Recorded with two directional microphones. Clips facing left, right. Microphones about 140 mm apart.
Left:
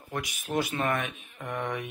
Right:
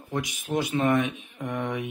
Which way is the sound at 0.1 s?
20° right (ahead or behind).